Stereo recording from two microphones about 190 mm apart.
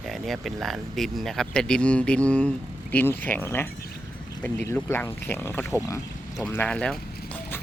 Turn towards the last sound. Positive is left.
turn(degrees=5)  # may be behind; listen again after turning